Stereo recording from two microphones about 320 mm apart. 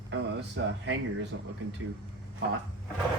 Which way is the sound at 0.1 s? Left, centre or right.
Right.